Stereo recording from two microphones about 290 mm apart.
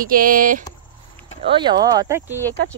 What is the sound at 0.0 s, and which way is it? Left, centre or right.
Speech, right.